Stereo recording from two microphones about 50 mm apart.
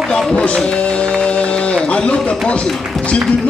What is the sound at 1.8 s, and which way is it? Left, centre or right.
Speech, left.